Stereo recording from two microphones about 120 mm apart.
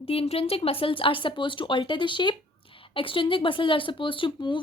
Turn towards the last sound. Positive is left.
turn(degrees=45)  # may be behind; listen again after turning